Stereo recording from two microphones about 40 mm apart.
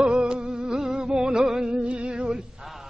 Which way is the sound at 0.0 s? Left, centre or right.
Right.